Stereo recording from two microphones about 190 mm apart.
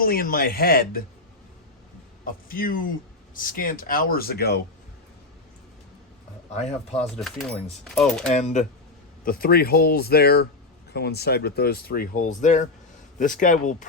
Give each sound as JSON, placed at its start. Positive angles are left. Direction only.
{"t": 0.0, "sound": "speech", "side_deg": 50}
{"t": 2.2, "sound": "speech", "side_deg": 45}
{"t": 6.9, "sound": "speech", "side_deg": 0}
{"t": 8.3, "sound": "speech", "side_deg": 35}
{"t": 9.2, "sound": "speech", "side_deg": 50}